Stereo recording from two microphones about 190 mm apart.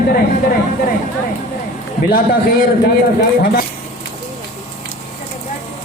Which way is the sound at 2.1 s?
50° left (ahead or behind).